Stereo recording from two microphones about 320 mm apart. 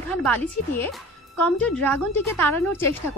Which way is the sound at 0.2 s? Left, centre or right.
Centre.